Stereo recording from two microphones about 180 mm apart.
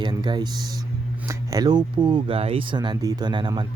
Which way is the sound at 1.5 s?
25° right (ahead or behind).